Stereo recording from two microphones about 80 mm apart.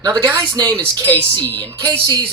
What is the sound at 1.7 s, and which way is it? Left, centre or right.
Speech, right.